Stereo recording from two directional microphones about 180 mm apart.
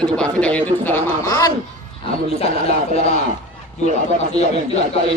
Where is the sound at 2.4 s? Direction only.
35° left (ahead or behind).